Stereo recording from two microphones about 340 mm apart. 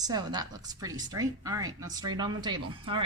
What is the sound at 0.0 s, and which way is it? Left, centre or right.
Speech, centre.